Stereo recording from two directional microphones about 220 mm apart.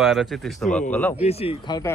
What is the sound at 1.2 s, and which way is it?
Speech, 25° left (ahead or behind).